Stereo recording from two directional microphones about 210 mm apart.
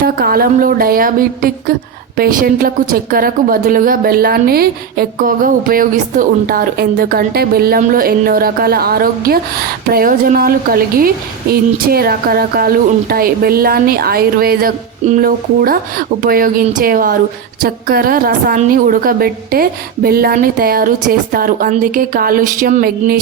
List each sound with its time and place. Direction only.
0.0 s a woman's voice: 45° right (ahead or behind)